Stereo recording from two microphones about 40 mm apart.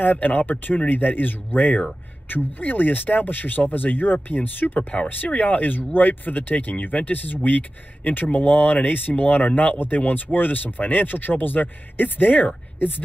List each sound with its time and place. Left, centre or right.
0.0 s speech: left
4.7 s speech: left
5.2 s speech: left